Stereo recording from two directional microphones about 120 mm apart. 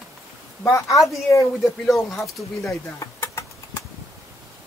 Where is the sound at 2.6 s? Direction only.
25° left (ahead or behind).